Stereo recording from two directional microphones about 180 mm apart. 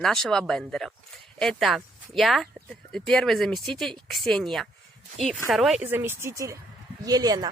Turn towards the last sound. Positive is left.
turn(degrees=-20)  # may be behind; listen again after turning